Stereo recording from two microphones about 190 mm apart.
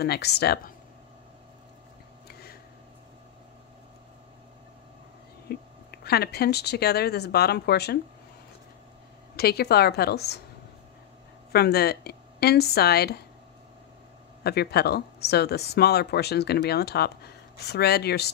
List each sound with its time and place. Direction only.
0.0 s speech: 60° left (ahead or behind)
5.5 s speech: 55° left (ahead or behind)
9.4 s speech: 55° left (ahead or behind)
11.5 s speech: 55° left (ahead or behind)
14.4 s speech: 60° left (ahead or behind)